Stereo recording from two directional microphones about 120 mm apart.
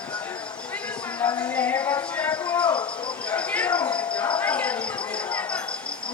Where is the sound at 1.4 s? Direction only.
15° left (ahead or behind).